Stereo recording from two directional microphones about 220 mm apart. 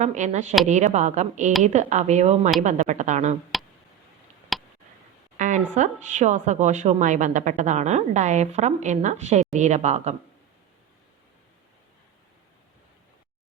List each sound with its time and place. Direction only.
0.0 s a woman's voice: 35° right (ahead or behind)
3.5 s a sound: centre (ahead or behind)
4.5 s tick: centre (ahead or behind)
5.4 s a woman's voice: 35° right (ahead or behind)